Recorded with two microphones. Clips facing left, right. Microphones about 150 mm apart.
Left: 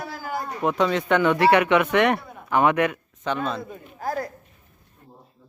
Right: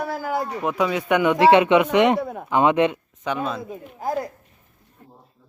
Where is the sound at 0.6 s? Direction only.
5° right (ahead or behind); by 3.0 s 25° right (ahead or behind).